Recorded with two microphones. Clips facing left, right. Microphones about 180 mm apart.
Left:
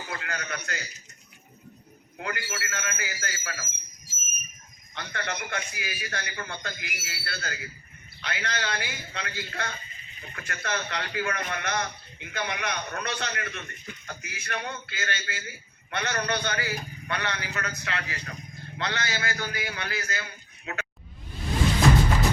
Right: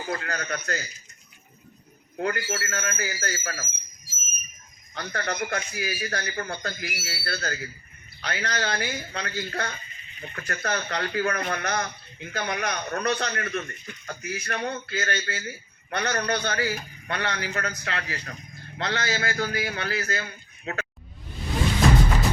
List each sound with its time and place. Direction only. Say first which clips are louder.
0.1 s a man's voice: right 5 dB; 40° right (ahead or behind)
2.1 s a man's voice: right 7 dB; 40° right (ahead or behind)
4.9 s a man's voice: right 5 dB; 40° right (ahead or behind)